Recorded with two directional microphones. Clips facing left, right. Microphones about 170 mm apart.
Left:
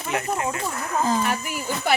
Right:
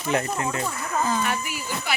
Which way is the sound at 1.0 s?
35° left (ahead or behind).